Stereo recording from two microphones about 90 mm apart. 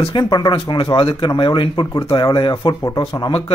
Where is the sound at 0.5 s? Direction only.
90° left.